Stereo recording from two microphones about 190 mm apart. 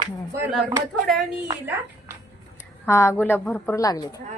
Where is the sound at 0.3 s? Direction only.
10° right (ahead or behind).